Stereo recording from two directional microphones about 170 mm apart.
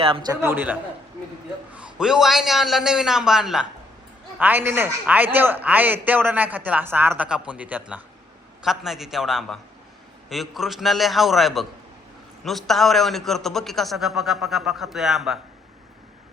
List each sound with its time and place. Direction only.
0.0 s a man's voice: 30° right (ahead or behind)
0.4 s a man's voice: 10° right (ahead or behind)